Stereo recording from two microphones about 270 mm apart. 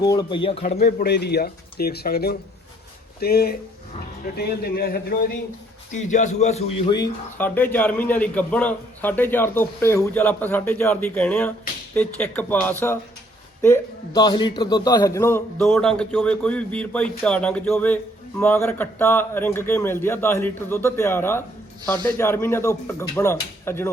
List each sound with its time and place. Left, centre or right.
0.0 s a man's voice: centre
0.8 s a man's voice: left; by 23.9 s centre